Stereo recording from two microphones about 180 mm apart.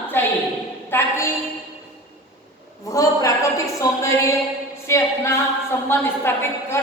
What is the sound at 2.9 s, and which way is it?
A woman's voice, 20° left (ahead or behind).